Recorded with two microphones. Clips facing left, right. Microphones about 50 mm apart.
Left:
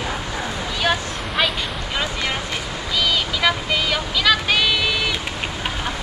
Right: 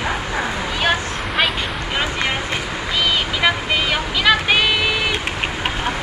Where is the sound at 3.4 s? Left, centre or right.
Right.